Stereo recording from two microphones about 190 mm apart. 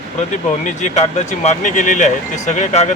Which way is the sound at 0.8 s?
40° left (ahead or behind).